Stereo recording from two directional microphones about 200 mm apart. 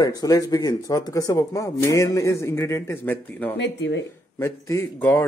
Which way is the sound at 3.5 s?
60° left (ahead or behind).